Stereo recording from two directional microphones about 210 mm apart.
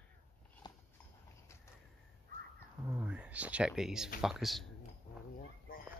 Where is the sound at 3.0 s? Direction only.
5° right (ahead or behind).